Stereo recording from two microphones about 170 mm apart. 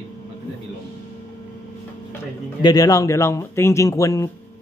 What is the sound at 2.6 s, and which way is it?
Speech, 20° left (ahead or behind).